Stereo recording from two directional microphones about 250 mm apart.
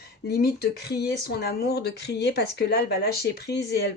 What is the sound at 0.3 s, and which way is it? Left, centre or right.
Speech, left.